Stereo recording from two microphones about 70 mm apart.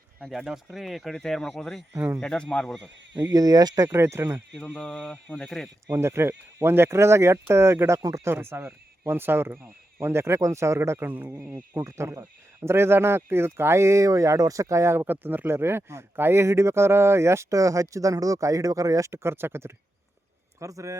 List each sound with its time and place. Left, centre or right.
0.4 s speech: centre
3.2 s speech: right
3.9 s speech: right
4.5 s speech: centre
5.9 s a man's voice: right
20.6 s a man's voice: right